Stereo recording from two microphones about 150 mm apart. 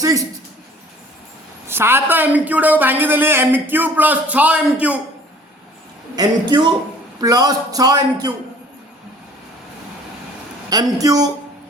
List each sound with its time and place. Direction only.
0.0 s a sound: 25° right (ahead or behind)
1.6 s a man's voice: 15° right (ahead or behind)
6.1 s a man's voice: 30° right (ahead or behind)
10.7 s a man's voice: 25° right (ahead or behind)